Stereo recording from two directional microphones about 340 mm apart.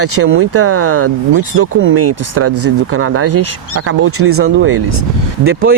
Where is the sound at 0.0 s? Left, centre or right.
Right.